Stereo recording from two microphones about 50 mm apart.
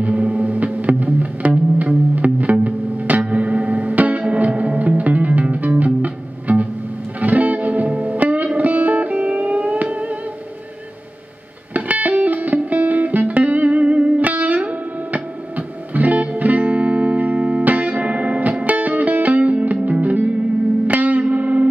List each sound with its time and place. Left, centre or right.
0.0 s music: right
11.7 s music: right